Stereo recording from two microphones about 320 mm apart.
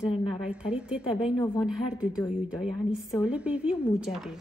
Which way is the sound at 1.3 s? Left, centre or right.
Centre.